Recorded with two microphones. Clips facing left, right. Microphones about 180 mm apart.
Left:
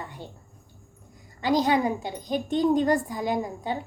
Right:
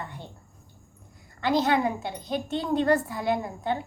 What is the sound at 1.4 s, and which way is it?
A woman's voice, 15° left (ahead or behind).